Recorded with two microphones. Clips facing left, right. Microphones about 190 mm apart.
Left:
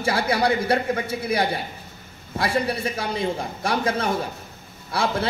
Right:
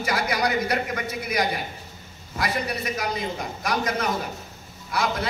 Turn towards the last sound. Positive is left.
turn(degrees=30)  # may be behind; listen again after turning